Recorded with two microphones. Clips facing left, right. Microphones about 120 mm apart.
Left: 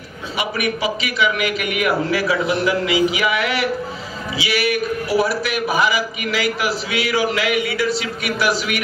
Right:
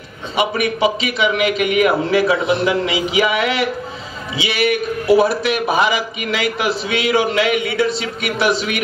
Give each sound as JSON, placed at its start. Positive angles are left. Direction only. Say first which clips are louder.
{"t": 0.4, "sound": "a man's voice", "louder": "right 5 dB", "side_deg": -25}